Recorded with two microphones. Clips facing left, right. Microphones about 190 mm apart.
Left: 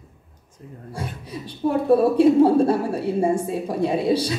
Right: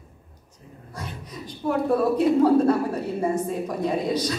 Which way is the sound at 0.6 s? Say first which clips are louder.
Left 6 dB; 50° left (ahead or behind).